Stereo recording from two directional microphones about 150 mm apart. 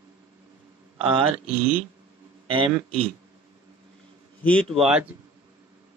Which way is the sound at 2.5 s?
35° right (ahead or behind).